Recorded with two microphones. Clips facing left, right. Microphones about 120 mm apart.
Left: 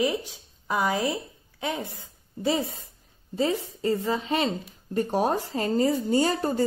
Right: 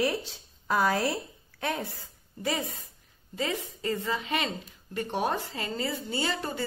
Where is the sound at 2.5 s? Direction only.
30° left (ahead or behind).